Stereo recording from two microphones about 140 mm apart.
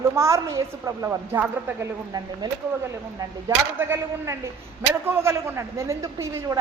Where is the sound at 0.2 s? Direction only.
20° right (ahead or behind).